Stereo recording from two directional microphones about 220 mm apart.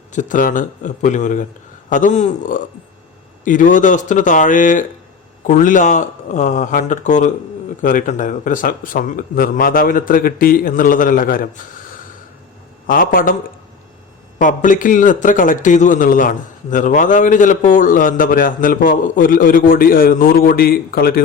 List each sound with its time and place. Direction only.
0.1 s a man's voice: 35° left (ahead or behind)
12.9 s a man's voice: 40° left (ahead or behind)
14.3 s a man's voice: 35° left (ahead or behind)